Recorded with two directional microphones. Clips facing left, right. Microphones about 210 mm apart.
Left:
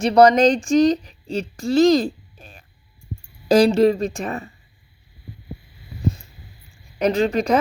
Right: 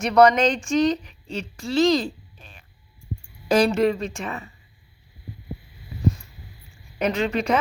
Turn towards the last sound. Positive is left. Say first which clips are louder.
# left 4 dB
turn(degrees=40)  # may be behind; listen again after turning